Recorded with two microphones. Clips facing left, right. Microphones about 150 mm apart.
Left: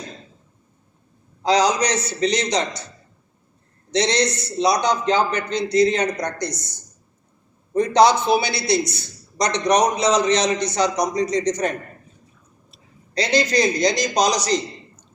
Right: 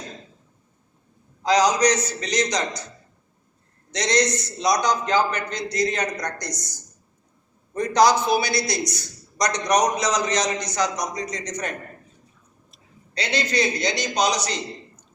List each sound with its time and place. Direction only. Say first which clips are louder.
1.4 s a man's voice: left 1 dB; 30° left (ahead or behind)
3.9 s a man's voice: left 2 dB; 30° left (ahead or behind)
13.1 s a man's voice: left 5 dB; 35° left (ahead or behind)